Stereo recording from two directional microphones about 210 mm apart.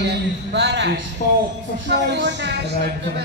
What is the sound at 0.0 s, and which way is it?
A man's voice, 55° right (ahead or behind).